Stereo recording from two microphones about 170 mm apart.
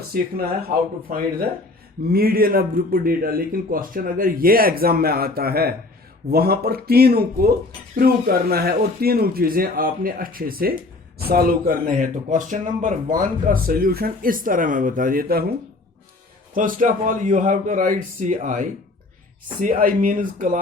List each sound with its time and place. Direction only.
0.1 s speech: 60° right (ahead or behind)
2.0 s speech: 60° right (ahead or behind)
16.6 s a man's voice: 50° right (ahead or behind)